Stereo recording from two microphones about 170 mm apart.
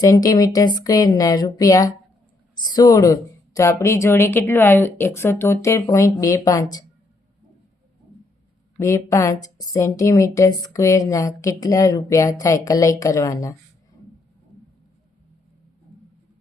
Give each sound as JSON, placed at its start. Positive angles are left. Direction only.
{"t": 0.0, "sound": "a woman's voice", "side_deg": 20}
{"t": 8.8, "sound": "a woman's voice", "side_deg": 15}